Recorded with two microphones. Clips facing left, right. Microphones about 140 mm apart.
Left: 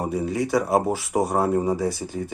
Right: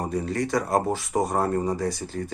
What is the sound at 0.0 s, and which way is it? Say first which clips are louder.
Speech: left 2 dB; 5° left (ahead or behind).